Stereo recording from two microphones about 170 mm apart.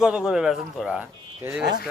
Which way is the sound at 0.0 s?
5° right (ahead or behind).